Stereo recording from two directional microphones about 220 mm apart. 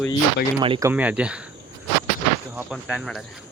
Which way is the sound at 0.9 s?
5° right (ahead or behind).